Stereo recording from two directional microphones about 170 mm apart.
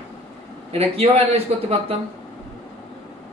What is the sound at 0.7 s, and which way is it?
Speech, 35° right (ahead or behind).